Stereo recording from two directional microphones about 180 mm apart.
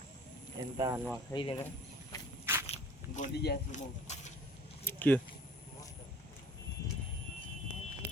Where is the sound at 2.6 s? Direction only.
40° left (ahead or behind).